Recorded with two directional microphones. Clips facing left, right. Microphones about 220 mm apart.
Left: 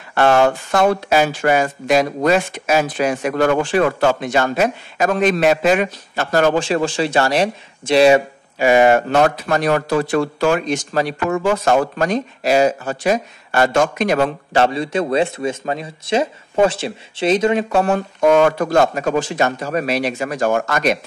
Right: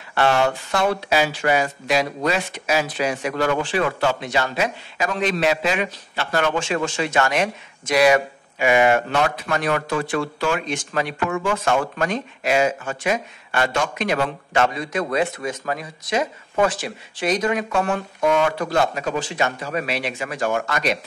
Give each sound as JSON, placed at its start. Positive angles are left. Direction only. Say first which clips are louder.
{"t": 0.1, "sound": "speech", "louder": "left 5 dB", "side_deg": 50}